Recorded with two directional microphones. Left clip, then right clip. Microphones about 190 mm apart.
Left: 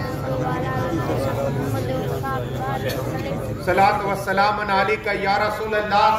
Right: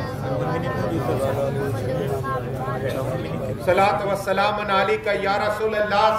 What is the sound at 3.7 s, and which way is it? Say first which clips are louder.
A man's voice: left 1 dB; 10° right (ahead or behind).